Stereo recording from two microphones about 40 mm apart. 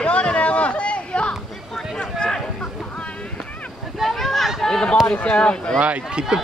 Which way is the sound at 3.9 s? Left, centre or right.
Centre.